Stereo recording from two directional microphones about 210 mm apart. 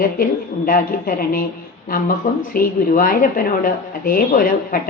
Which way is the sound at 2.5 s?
40° left (ahead or behind).